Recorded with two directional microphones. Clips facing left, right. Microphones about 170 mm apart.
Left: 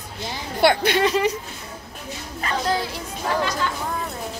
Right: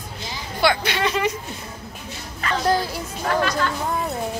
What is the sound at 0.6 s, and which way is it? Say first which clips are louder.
Speech: left 3 dB; 50° left (ahead or behind).